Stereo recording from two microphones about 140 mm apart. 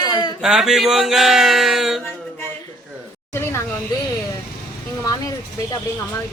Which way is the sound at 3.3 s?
20° left (ahead or behind).